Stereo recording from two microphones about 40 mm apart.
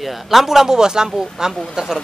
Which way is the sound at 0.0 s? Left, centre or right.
Centre.